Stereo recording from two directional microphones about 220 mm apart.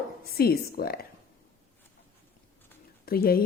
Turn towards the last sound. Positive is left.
turn(degrees=45)  # may be behind; listen again after turning